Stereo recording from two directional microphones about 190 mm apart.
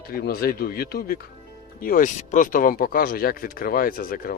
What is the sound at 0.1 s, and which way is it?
Speech, 55° left (ahead or behind).